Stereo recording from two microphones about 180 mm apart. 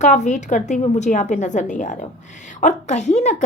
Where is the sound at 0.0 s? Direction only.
40° left (ahead or behind).